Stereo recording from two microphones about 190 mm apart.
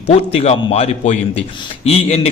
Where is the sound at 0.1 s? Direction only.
30° left (ahead or behind).